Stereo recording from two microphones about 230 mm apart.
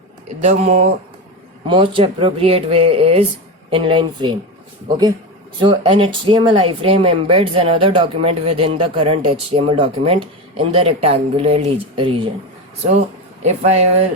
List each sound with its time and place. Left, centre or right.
0.4 s speech: right
13.4 s speech: right